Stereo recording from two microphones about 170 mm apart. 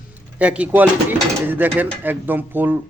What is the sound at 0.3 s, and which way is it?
Speech, 10° right (ahead or behind).